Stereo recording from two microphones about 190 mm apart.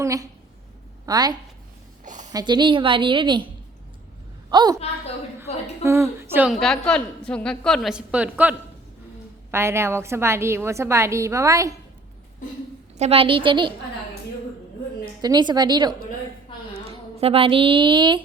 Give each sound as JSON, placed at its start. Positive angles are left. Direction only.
{"t": 0.0, "sound": "a woman's voice", "side_deg": -15}
{"t": 2.0, "sound": "a sound", "side_deg": -40}
{"t": 2.3, "sound": "a woman's voice", "side_deg": -20}
{"t": 4.5, "sound": "a woman's voice", "side_deg": -20}
{"t": 5.8, "sound": "a woman's voice", "side_deg": -15}
{"t": 6.6, "sound": "a woman's voice", "side_deg": 5}
{"t": 13.0, "sound": "a woman's voice", "side_deg": -30}
{"t": 15.2, "sound": "a woman's voice", "side_deg": -20}